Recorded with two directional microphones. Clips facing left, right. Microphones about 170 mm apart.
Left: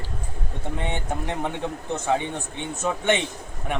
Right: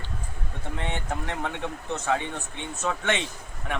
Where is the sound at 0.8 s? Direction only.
15° left (ahead or behind).